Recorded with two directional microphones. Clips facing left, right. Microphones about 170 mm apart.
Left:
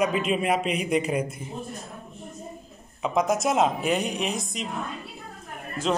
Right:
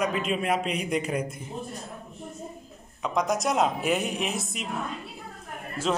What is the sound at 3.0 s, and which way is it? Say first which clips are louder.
A woman's voice: left 3 dB; 5° left (ahead or behind).